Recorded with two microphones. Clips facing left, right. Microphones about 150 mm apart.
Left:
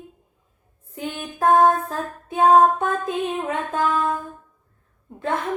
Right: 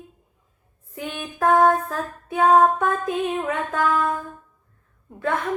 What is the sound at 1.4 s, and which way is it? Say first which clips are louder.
Music: left 1 dB; 25° left (ahead or behind).